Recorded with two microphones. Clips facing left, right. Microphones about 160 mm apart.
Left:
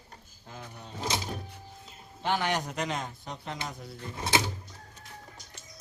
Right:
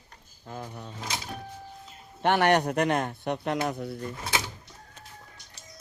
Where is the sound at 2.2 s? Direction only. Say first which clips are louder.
Right 7 dB; 65° right (ahead or behind).